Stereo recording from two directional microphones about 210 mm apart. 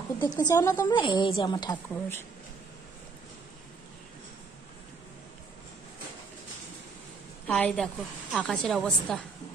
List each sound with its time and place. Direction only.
0.2 s a woman's voice: 20° left (ahead or behind)
7.4 s a woman's voice: 5° left (ahead or behind)